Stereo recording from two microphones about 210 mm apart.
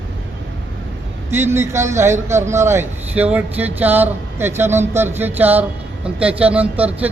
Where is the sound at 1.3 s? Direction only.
10° right (ahead or behind).